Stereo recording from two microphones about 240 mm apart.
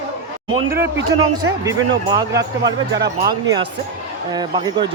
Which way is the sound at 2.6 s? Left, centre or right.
Right.